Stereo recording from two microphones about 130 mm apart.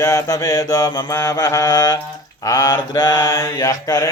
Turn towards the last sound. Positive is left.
turn(degrees=25)  # may be behind; listen again after turning